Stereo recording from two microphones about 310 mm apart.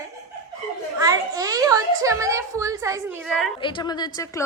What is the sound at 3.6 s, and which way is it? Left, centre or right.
Speech, centre.